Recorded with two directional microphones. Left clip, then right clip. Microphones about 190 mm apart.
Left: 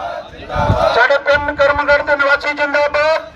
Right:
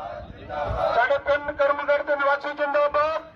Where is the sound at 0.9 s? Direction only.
20° left (ahead or behind).